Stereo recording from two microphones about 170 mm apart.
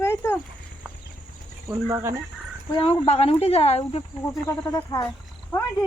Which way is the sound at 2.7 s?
30° left (ahead or behind).